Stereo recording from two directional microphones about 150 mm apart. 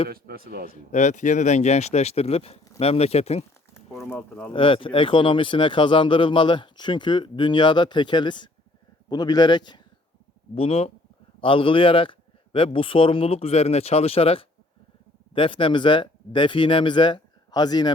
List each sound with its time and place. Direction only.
0.1 s a man's voice: 90° right
0.7 s speech: 50° left (ahead or behind)
4.1 s speech: 10° left (ahead or behind)
4.5 s speech: 35° left (ahead or behind)
10.5 s speech: 40° left (ahead or behind)